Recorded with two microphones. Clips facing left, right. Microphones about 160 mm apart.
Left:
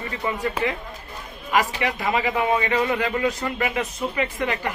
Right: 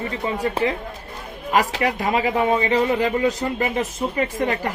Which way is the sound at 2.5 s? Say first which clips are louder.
Right 2 dB; 30° right (ahead or behind).